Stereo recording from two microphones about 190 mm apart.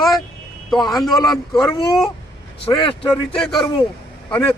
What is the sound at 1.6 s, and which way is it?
Speech, 15° left (ahead or behind).